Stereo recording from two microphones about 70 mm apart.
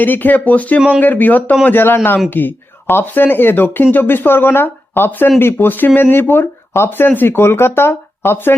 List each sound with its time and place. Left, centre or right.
0.0 s speech: left